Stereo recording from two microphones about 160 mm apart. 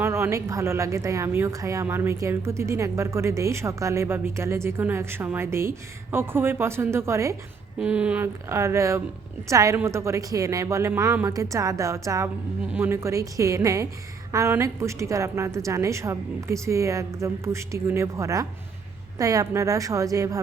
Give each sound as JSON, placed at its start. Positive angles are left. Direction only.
{"t": 0.0, "sound": "a woman's voice", "side_deg": -15}
{"t": 7.8, "sound": "a woman's voice", "side_deg": -5}